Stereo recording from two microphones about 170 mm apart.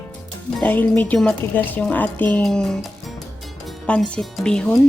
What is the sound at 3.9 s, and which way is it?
Speech, 5° left (ahead or behind).